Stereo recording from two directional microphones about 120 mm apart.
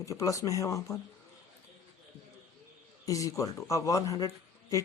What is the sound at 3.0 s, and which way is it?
Speech, 30° left (ahead or behind).